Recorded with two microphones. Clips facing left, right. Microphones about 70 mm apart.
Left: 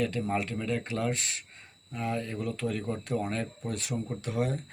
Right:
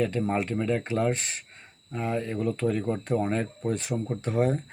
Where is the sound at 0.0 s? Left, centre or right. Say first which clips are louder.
Right 3 dB; right.